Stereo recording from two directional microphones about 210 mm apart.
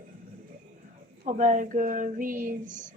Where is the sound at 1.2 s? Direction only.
35° right (ahead or behind).